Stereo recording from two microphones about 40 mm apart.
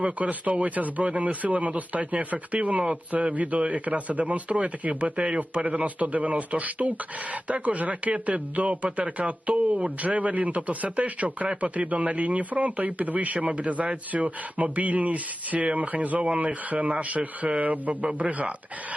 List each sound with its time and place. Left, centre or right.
0.0 s speech: right